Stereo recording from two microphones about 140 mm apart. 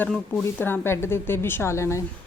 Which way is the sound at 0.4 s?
15° left (ahead or behind).